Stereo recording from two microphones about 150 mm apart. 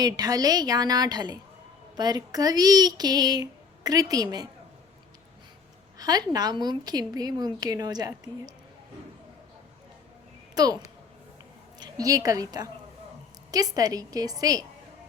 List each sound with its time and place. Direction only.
0.0 s a woman's voice: 25° right (ahead or behind)
6.0 s a woman's voice: 25° right (ahead or behind)
10.5 s a woman's voice: 25° right (ahead or behind)